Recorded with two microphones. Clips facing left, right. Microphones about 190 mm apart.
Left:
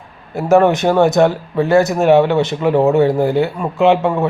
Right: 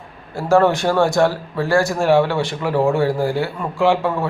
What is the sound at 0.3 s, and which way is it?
A man's voice, 20° left (ahead or behind).